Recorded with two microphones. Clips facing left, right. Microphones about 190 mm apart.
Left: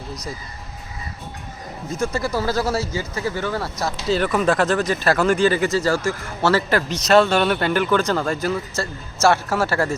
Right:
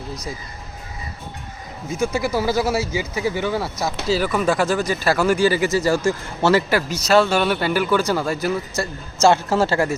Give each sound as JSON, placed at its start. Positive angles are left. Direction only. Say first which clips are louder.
{"t": 2.1, "sound": "a man's voice", "louder": "right 2 dB", "side_deg": -10}